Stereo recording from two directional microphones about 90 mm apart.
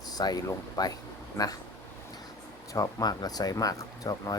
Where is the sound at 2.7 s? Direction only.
40° left (ahead or behind).